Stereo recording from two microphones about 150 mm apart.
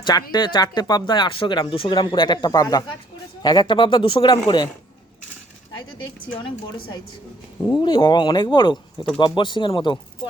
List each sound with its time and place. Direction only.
0.0 s speech: 30° left (ahead or behind)
7.7 s speech: 35° left (ahead or behind)